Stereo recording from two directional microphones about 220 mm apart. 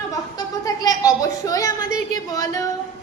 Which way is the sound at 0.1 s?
15° left (ahead or behind).